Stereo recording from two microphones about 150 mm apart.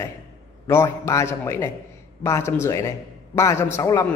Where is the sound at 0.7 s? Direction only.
20° left (ahead or behind).